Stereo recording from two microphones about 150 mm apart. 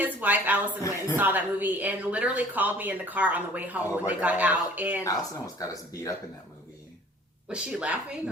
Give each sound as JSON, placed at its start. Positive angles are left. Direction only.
{"t": 0.0, "sound": "speech", "side_deg": -10}
{"t": 0.8, "sound": "speech", "side_deg": 20}
{"t": 1.1, "sound": "a woman's voice", "side_deg": -10}
{"t": 5.0, "sound": "speech", "side_deg": 25}
{"t": 7.4, "sound": "a woman's voice", "side_deg": -5}